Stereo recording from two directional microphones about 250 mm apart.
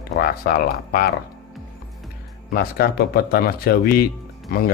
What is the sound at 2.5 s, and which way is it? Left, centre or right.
Speech, left.